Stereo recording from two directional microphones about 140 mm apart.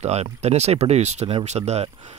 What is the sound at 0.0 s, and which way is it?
Speech, 50° right (ahead or behind).